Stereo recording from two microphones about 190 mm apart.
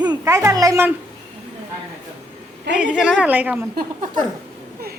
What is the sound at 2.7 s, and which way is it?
Speech, 5° right (ahead or behind).